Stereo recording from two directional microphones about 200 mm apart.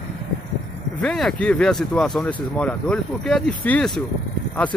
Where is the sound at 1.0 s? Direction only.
Centre (ahead or behind).